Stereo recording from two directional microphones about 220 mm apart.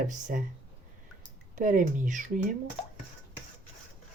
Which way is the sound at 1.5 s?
35° right (ahead or behind).